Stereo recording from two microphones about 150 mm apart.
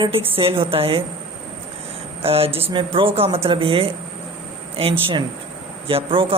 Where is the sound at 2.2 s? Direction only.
40° right (ahead or behind).